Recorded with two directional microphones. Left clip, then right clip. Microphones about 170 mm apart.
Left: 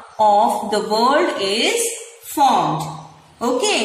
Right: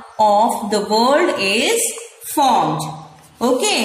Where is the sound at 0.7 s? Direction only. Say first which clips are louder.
Right 1 dB; 20° right (ahead or behind).